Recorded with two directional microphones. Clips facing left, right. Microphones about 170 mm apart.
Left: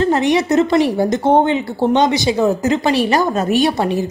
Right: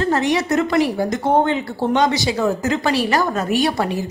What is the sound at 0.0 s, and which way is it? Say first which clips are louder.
A woman's voice: left 4 dB; 20° left (ahead or behind).